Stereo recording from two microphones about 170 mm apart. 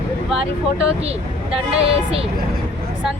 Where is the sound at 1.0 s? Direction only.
35° right (ahead or behind).